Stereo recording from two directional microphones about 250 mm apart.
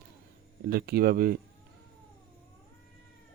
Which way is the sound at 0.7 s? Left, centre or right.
Right.